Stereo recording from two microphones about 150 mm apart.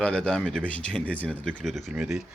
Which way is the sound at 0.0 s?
5° left (ahead or behind).